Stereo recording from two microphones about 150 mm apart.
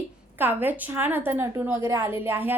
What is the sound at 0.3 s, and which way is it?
A woman's voice, 15° right (ahead or behind).